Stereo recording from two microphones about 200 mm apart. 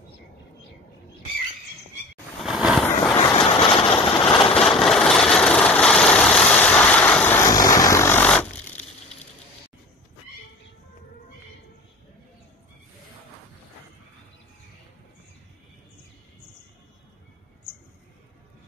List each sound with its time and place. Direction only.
2.4 s vehicle: centre (ahead or behind)
3.3 s vehicle: 25° left (ahead or behind)
4.6 s vehicle: centre (ahead or behind)